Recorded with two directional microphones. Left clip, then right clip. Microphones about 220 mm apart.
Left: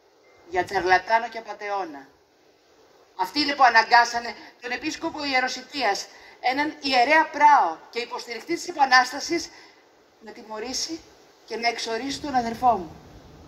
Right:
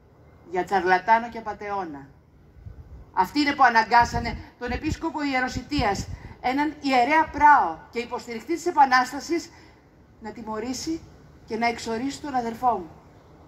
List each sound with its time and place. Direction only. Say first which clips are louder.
0.5 s speech: left 1 dB; 15° left (ahead or behind)
3.2 s speech: right 1 dB; 15° left (ahead or behind)